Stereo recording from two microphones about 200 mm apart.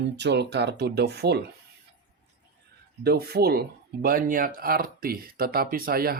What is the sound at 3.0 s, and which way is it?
Speech, 50° right (ahead or behind).